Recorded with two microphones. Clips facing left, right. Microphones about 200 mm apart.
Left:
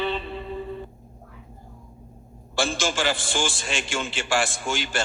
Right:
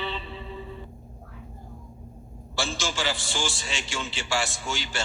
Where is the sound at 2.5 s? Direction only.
50° left (ahead or behind).